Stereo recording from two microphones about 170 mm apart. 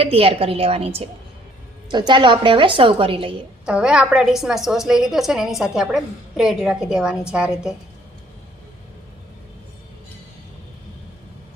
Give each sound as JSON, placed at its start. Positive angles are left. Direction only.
{"t": 0.0, "sound": "a woman's voice", "side_deg": -35}
{"t": 3.7, "sound": "a woman's voice", "side_deg": -5}